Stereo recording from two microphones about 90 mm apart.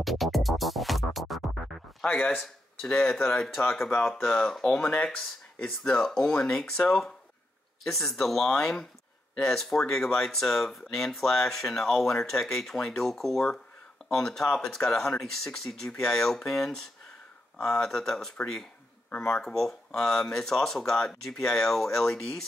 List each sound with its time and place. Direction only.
0.0 s music: centre (ahead or behind)
2.0 s a man's voice: 20° left (ahead or behind)
2.8 s speech: 5° left (ahead or behind)